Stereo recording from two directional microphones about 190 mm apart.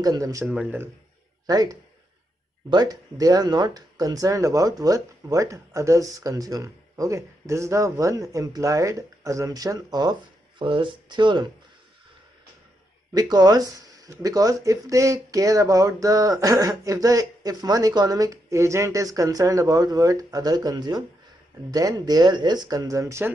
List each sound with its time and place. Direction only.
0.0 s speech: 20° right (ahead or behind)
0.5 s speech: 5° right (ahead or behind)
1.5 s speech: 20° right (ahead or behind)
13.1 s speech: 20° right (ahead or behind)